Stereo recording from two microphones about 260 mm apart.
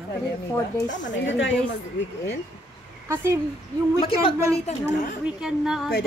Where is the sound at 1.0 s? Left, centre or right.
Left.